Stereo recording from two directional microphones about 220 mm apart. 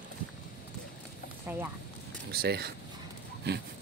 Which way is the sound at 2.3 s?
45° right (ahead or behind).